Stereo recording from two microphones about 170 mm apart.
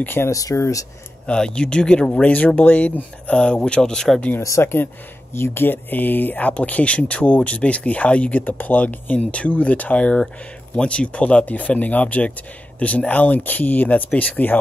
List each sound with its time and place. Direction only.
0.0 s speech: 15° left (ahead or behind)
1.2 s speech: 5° left (ahead or behind)
4.4 s speech: 15° left (ahead or behind)